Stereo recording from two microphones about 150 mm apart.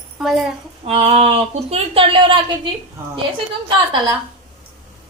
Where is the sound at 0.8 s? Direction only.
40° right (ahead or behind).